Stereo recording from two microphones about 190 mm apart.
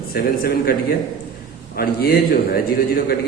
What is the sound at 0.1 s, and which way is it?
A man's voice, 55° left (ahead or behind).